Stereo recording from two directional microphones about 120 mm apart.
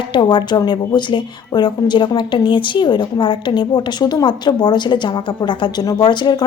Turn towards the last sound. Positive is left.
turn(degrees=40)  # may be behind; listen again after turning